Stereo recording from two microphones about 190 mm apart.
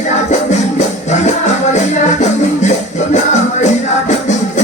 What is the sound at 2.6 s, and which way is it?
Music, 40° left (ahead or behind).